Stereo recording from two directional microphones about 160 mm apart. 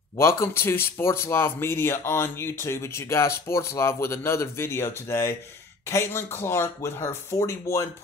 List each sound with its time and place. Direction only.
0.4 s speech: 15° left (ahead or behind)